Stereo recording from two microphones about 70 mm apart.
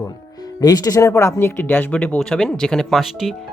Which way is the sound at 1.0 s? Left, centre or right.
Left.